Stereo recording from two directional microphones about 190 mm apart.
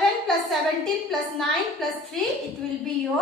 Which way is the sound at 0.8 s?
Centre (ahead or behind).